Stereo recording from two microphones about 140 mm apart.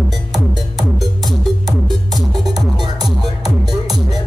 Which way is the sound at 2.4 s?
30° right (ahead or behind).